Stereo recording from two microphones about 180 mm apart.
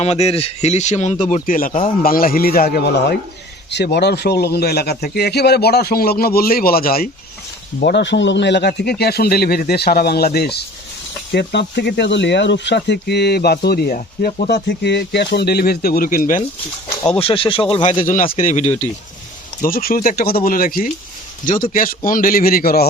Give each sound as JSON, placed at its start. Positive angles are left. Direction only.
{"t": 0.0, "sound": "speech", "side_deg": 35}
{"t": 7.8, "sound": "speech", "side_deg": 70}
{"t": 17.2, "sound": "speech", "side_deg": 30}
{"t": 18.0, "sound": "a man's voice", "side_deg": 50}
{"t": 19.6, "sound": "a man's voice", "side_deg": 50}